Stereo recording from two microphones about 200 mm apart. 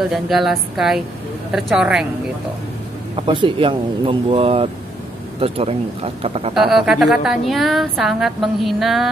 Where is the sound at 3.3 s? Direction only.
25° right (ahead or behind).